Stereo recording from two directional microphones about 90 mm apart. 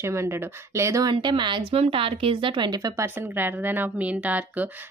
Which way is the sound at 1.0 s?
60° right (ahead or behind).